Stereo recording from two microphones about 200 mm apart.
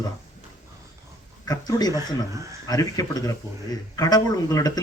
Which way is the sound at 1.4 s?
20° left (ahead or behind).